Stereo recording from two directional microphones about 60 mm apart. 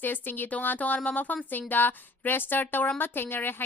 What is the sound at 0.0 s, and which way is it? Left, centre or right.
A woman's voice, left.